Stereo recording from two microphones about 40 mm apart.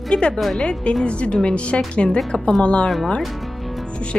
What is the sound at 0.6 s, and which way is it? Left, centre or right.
Speech, left.